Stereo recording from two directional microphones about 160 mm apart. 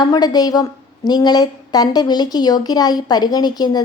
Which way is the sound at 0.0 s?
25° left (ahead or behind).